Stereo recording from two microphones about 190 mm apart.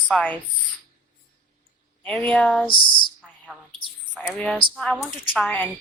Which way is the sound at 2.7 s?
25° left (ahead or behind).